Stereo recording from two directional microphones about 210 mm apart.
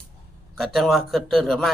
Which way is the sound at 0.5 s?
Centre (ahead or behind).